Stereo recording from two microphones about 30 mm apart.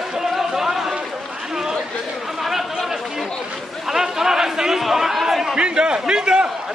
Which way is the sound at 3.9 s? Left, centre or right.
Centre.